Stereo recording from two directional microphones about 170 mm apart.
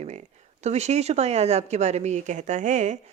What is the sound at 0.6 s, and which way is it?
A woman's voice, 40° right (ahead or behind).